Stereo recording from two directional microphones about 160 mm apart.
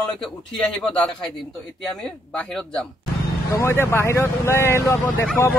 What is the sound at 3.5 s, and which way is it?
Speech, 15° left (ahead or behind).